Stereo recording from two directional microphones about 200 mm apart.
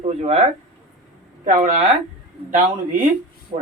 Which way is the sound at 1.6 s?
40° right (ahead or behind).